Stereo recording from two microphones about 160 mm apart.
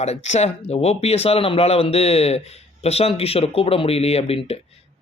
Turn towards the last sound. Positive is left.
turn(degrees=40)  # may be behind; listen again after turning